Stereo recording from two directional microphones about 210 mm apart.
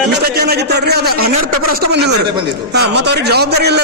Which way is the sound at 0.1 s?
50° right (ahead or behind).